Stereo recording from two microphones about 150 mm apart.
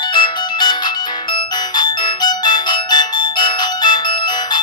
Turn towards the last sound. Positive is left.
turn(degrees=30)  # may be behind; listen again after turning